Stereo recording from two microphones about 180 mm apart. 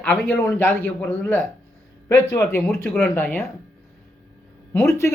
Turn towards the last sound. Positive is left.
turn(degrees=15)  # may be behind; listen again after turning